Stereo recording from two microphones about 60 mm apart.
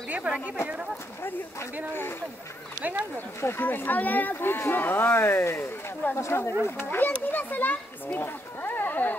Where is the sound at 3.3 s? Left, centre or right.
Left.